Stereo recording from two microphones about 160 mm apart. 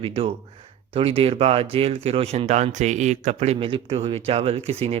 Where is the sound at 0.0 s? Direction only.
35° right (ahead or behind).